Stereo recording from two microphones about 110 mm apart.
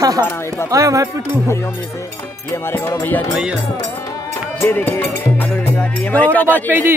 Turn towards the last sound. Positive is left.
turn(degrees=15)  # may be behind; listen again after turning